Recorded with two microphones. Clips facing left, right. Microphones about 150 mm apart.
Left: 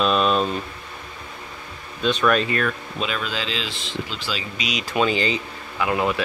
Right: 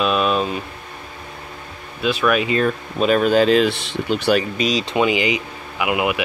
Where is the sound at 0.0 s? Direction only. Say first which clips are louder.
Right 1 dB; 5° right (ahead or behind).